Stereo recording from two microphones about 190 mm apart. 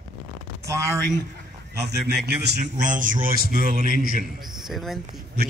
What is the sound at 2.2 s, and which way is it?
Speech, 60° right (ahead or behind).